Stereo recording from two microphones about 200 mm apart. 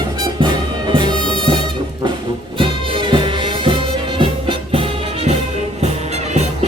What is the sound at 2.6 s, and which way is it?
Music, 25° right (ahead or behind).